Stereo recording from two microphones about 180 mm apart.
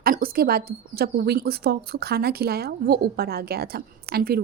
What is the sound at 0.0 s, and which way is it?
A woman's voice, 55° right (ahead or behind).